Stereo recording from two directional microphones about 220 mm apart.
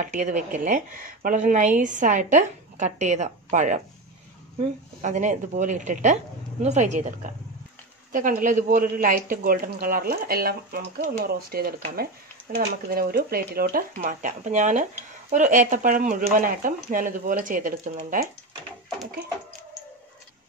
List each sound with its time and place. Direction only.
0.1 s speech: 35° right (ahead or behind)
5.0 s speech: 35° right (ahead or behind)